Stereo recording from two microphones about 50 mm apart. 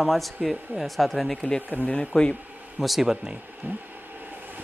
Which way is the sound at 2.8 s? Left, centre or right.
Centre.